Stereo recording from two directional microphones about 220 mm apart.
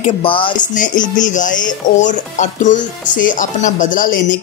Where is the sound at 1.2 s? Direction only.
35° left (ahead or behind).